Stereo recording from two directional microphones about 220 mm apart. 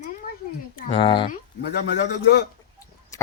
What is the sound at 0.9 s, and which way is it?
Speech, 20° left (ahead or behind).